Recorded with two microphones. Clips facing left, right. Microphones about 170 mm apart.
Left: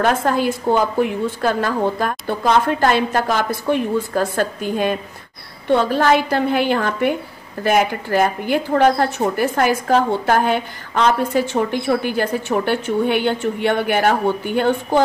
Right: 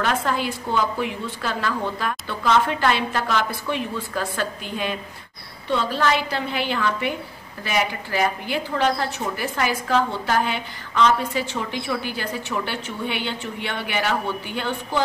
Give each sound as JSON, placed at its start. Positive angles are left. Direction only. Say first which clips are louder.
{"t": 0.0, "sound": "a woman's voice", "louder": "left 6 dB", "side_deg": 45}